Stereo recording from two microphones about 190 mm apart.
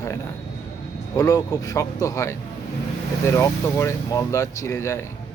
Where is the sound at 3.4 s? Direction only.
15° left (ahead or behind).